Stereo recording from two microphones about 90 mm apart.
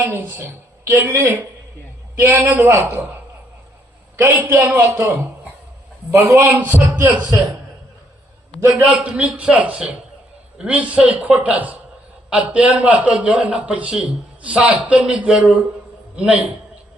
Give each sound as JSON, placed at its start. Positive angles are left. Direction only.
{"t": 0.0, "sound": "a woman's voice", "side_deg": -25}
{"t": 4.2, "sound": "a woman's voice", "side_deg": -30}
{"t": 6.6, "sound": "a woman's voice", "side_deg": -20}
{"t": 8.8, "sound": "a man's voice", "side_deg": -15}